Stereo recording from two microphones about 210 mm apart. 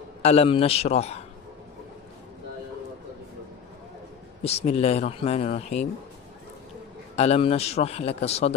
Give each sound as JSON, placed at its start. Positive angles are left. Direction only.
{"t": 0.2, "sound": "speech", "side_deg": 30}
{"t": 4.4, "sound": "speech", "side_deg": 30}
{"t": 7.2, "sound": "speech", "side_deg": 30}